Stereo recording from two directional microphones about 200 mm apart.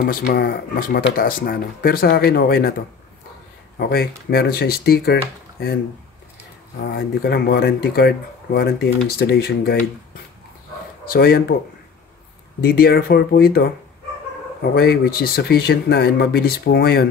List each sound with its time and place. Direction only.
0.0 s speech: 50° left (ahead or behind)
3.7 s speech: 50° left (ahead or behind)
6.8 s speech: 50° left (ahead or behind)
11.1 s speech: 50° left (ahead or behind)
12.5 s speech: 50° left (ahead or behind)